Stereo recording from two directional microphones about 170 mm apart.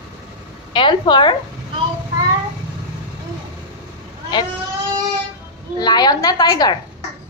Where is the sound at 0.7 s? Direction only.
25° left (ahead or behind).